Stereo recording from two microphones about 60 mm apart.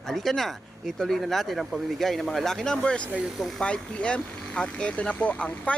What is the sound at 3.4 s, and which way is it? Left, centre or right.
Speech, centre.